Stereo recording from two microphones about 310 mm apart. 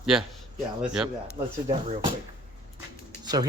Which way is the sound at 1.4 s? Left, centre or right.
Centre.